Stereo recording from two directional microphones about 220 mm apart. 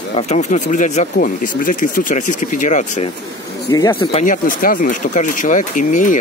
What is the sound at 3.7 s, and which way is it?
Speech, 15° left (ahead or behind).